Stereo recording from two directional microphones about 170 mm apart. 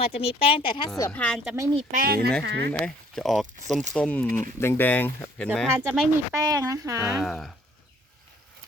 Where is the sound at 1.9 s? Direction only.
60° right (ahead or behind).